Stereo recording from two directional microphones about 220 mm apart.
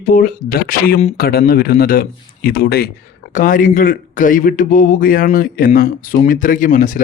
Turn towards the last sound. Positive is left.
turn(degrees=35)  # may be behind; listen again after turning